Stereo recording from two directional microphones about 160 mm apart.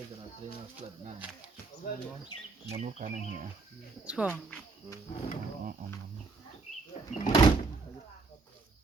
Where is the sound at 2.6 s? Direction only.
40° right (ahead or behind).